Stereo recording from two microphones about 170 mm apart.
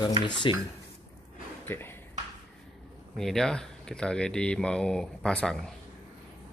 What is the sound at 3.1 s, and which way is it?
Speech, 5° left (ahead or behind).